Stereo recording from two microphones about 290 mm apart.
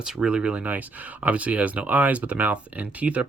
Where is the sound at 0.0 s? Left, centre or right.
Centre.